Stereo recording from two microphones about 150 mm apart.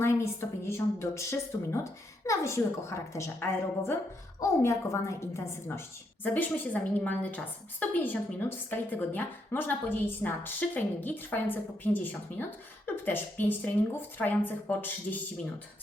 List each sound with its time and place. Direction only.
0.0 s a woman's voice: 15° left (ahead or behind)
7.0 s a woman's voice: 10° left (ahead or behind)